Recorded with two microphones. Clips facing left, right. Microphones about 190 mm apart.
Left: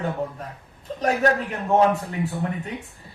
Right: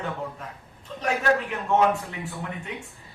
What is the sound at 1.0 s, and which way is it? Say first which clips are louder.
Speech: left 3 dB; 40° left (ahead or behind).